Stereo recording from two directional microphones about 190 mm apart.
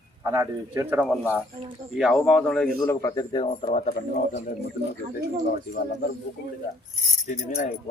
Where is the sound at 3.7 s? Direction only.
35° left (ahead or behind).